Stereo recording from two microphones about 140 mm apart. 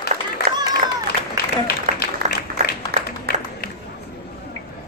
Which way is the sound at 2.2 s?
90° right.